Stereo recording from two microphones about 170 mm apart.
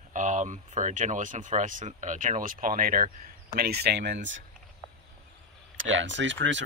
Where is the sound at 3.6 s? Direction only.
70° right (ahead or behind).